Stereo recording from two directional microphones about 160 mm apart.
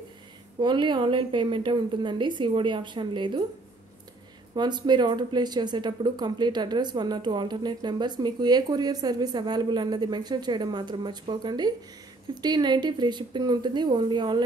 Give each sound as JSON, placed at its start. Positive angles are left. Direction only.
{"t": 0.6, "sound": "a woman's voice", "side_deg": -30}
{"t": 4.6, "sound": "speech", "side_deg": -25}